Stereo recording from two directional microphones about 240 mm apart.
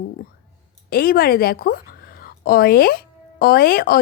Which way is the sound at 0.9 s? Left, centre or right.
Left.